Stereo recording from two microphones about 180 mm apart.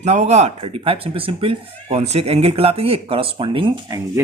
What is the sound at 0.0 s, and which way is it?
A man's voice, 40° right (ahead or behind).